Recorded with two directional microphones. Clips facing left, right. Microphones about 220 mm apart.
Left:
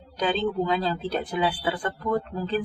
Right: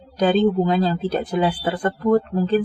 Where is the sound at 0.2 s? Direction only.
45° right (ahead or behind).